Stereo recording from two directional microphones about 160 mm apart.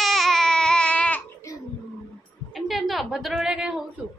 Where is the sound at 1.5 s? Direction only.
20° left (ahead or behind).